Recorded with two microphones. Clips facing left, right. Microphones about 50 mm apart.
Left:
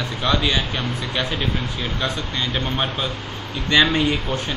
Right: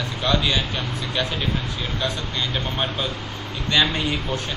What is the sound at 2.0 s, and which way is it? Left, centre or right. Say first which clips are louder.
Speech: left 1 dB; centre.